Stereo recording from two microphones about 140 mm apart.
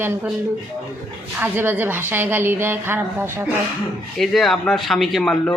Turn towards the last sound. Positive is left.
turn(degrees=0)  # may be behind; listen again after turning